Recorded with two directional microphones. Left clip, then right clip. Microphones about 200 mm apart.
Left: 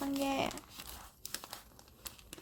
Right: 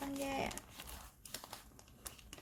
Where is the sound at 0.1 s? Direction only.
60° left (ahead or behind).